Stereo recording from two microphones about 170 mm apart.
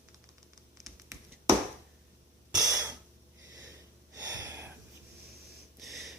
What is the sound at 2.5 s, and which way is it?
Breathing, 20° right (ahead or behind).